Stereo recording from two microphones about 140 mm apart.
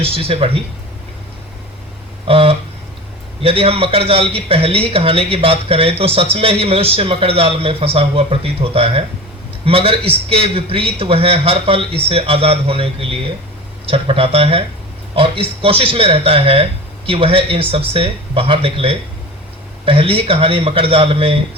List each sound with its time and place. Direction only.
0.0 s a man's voice: 40° right (ahead or behind)
2.2 s a man's voice: 45° right (ahead or behind)